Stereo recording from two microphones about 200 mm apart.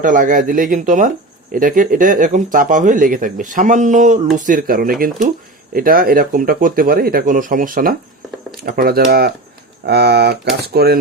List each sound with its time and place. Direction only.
0.0 s speech: 40° right (ahead or behind)